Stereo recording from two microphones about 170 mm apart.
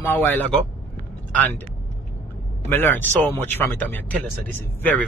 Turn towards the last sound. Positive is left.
turn(degrees=10)  # may be behind; listen again after turning